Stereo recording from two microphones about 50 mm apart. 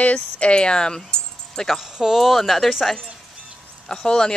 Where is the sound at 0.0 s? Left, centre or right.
Left.